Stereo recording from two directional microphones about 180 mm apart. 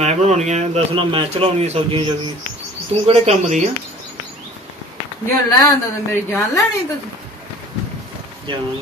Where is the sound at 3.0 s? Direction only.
35° right (ahead or behind).